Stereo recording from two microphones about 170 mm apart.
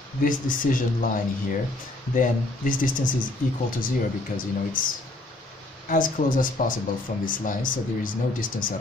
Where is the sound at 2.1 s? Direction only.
50° left (ahead or behind).